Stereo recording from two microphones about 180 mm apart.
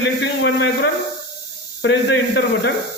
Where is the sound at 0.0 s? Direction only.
85° left.